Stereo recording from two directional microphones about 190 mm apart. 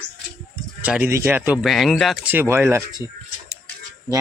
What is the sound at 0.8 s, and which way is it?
Speech, 10° right (ahead or behind).